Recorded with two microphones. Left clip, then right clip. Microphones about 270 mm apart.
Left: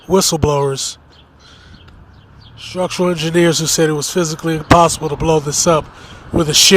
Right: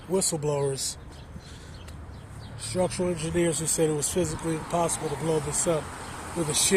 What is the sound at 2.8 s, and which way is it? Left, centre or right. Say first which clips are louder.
Speech: left 13 dB; left.